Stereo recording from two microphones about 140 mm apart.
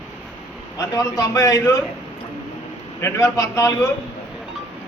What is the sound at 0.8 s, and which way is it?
Speech, 20° left (ahead or behind).